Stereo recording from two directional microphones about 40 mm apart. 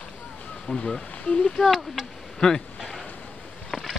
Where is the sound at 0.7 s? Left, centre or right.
Centre.